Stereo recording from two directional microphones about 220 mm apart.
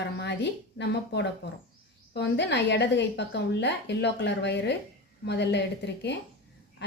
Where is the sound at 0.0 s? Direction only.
50° left (ahead or behind).